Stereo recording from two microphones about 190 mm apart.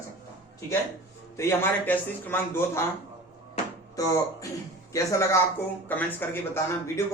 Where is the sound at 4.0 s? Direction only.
20° left (ahead or behind).